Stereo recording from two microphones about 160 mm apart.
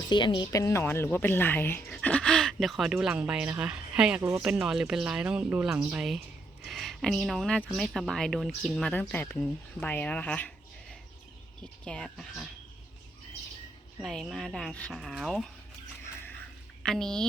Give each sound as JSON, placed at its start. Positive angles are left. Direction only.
{"t": 0.1, "sound": "speech", "side_deg": 30}
{"t": 4.2, "sound": "speech", "side_deg": -20}
{"t": 4.4, "sound": "speech", "side_deg": -5}
{"t": 14.0, "sound": "speech", "side_deg": 0}
{"t": 16.8, "sound": "speech", "side_deg": 5}